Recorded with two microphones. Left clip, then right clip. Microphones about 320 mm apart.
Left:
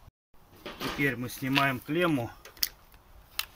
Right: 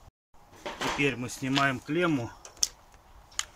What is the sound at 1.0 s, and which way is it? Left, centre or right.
Speech, centre.